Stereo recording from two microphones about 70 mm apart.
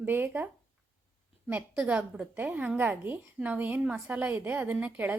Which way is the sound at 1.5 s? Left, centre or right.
Right.